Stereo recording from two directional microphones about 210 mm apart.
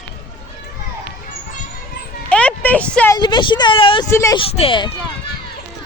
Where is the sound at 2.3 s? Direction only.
5° left (ahead or behind).